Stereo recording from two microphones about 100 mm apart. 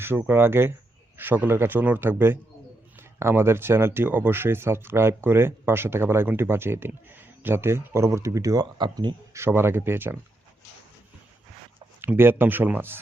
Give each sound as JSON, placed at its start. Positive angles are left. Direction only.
{"t": 0.0, "sound": "speech", "side_deg": -25}
{"t": 8.8, "sound": "a man's voice", "side_deg": -50}
{"t": 9.3, "sound": "speech", "side_deg": -25}
{"t": 12.0, "sound": "speech", "side_deg": -20}